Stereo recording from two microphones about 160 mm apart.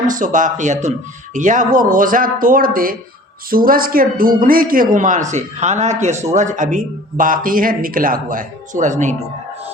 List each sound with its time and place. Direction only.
0.1 s a man's voice: 55° right (ahead or behind)